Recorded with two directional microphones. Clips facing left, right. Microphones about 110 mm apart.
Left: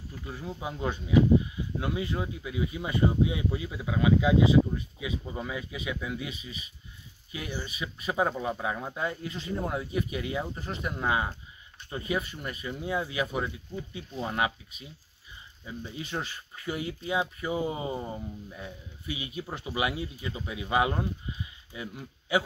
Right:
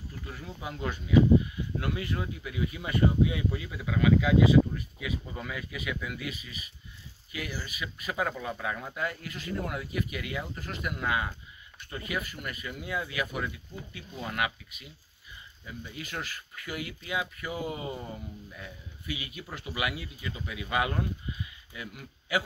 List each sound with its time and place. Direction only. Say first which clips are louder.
0.3 s speech: left 4 dB; 20° left (ahead or behind)